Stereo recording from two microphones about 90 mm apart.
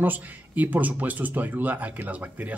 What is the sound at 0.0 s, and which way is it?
A man's voice, 20° right (ahead or behind).